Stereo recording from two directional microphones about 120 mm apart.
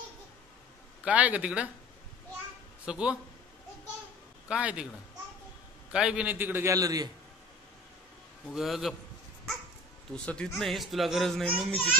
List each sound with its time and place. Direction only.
1.0 s a man's voice: 10° right (ahead or behind)
2.8 s a man's voice: 10° right (ahead or behind)
4.5 s a man's voice: 10° right (ahead or behind)
5.9 s a man's voice: 5° right (ahead or behind); by 7.1 s 30° right (ahead or behind)
8.5 s speech: centre (ahead or behind)
10.1 s speech: 5° left (ahead or behind)